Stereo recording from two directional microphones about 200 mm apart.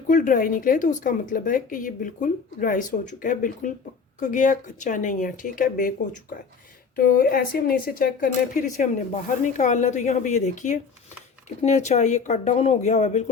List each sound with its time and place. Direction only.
0.1 s a woman's voice: 40° left (ahead or behind)
6.9 s a woman's voice: 45° left (ahead or behind)